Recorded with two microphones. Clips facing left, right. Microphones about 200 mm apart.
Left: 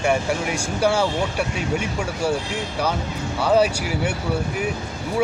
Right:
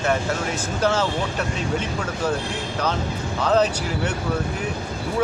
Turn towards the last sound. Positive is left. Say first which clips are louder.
# left 1 dB
turn(degrees=10)  # may be behind; listen again after turning